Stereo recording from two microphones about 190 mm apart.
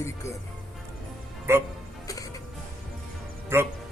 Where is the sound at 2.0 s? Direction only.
20° left (ahead or behind).